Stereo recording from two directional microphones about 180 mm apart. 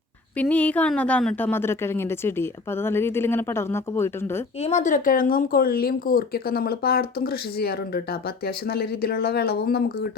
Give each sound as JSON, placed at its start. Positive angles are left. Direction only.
{"t": 0.3, "sound": "a woman's voice", "side_deg": 10}
{"t": 4.6, "sound": "speech", "side_deg": 40}